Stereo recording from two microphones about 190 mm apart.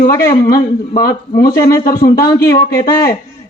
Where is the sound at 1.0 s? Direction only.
50° left (ahead or behind).